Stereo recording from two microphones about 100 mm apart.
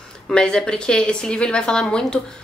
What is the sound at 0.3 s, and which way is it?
A woman's voice, 10° left (ahead or behind).